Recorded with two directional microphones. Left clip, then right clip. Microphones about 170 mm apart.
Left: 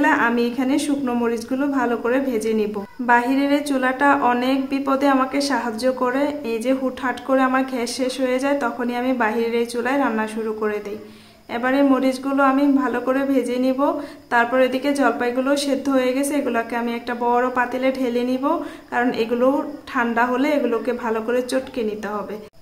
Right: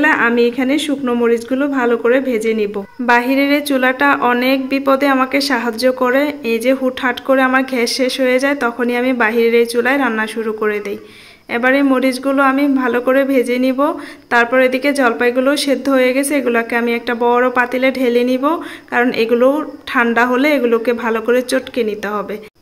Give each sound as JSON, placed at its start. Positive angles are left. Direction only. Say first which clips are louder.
{"t": 0.0, "sound": "speech", "louder": "right 6 dB", "side_deg": -20}